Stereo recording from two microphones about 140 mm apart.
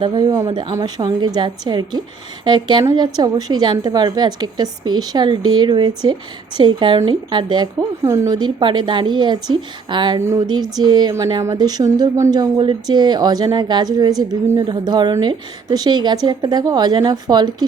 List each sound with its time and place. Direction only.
0.0 s a woman's voice: 30° right (ahead or behind)
8.0 s a woman's voice: 20° right (ahead or behind)
10.2 s a woman's voice: 20° right (ahead or behind)